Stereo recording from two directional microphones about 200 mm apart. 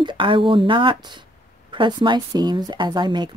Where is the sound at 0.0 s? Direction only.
25° right (ahead or behind).